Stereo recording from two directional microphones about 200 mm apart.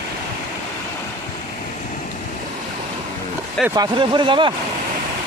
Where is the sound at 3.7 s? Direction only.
20° right (ahead or behind).